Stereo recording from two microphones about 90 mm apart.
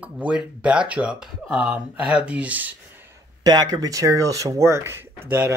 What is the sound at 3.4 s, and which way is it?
Speech, 45° right (ahead or behind).